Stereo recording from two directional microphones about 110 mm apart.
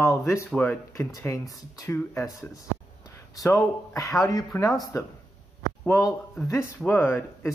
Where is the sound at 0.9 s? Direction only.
25° left (ahead or behind).